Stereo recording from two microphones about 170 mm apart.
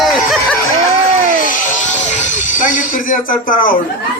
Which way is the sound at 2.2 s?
50° left (ahead or behind).